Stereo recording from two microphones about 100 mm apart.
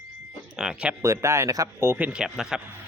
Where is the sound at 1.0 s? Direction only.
30° right (ahead or behind).